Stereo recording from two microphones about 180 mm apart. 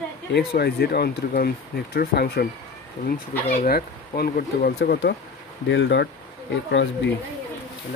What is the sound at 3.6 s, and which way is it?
Speech, 60° left (ahead or behind).